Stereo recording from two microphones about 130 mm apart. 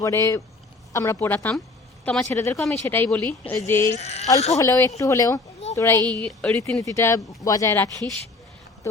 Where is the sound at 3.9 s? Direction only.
60° left (ahead or behind).